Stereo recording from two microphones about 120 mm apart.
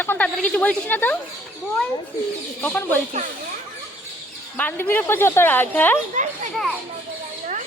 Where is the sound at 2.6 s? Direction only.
15° left (ahead or behind).